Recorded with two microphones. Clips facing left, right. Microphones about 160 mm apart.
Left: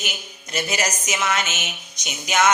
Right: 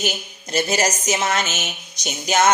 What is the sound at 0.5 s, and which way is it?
A woman's voice, 35° right (ahead or behind).